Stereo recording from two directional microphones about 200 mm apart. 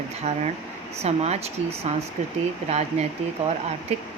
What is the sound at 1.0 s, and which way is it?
Speech, 35° right (ahead or behind).